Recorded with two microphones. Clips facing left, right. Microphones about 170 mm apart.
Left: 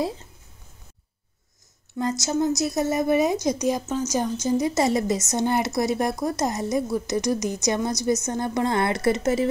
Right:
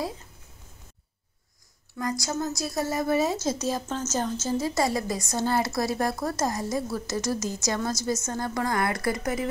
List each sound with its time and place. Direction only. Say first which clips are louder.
2.0 s a woman's voice: left 5 dB; 25° left (ahead or behind)